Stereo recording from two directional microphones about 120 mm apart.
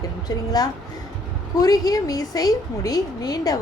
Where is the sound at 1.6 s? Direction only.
30° left (ahead or behind).